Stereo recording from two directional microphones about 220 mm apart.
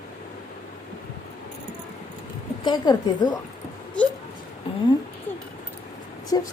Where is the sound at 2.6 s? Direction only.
20° left (ahead or behind).